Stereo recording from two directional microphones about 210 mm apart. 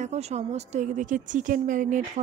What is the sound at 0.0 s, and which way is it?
A woman's voice, 30° right (ahead or behind).